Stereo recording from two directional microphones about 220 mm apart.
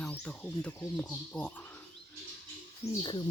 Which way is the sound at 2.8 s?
30° left (ahead or behind).